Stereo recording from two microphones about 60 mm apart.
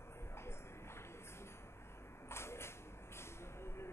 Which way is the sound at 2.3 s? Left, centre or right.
Left.